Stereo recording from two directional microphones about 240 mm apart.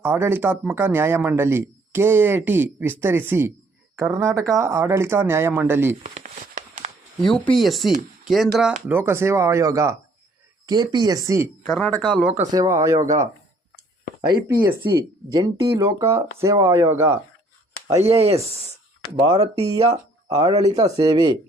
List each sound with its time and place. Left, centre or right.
0.0 s a man's voice: centre
6.0 s a sound: right
7.5 s a man's voice: centre
11.6 s speech: centre
12.5 s a man's voice: centre
17.9 s speech: right
20.3 s a man's voice: centre